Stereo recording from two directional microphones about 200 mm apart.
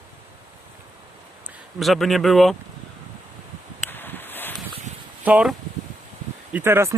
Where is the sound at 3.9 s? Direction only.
10° left (ahead or behind).